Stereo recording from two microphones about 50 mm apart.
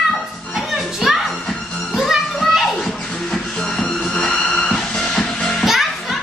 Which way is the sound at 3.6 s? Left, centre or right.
Centre.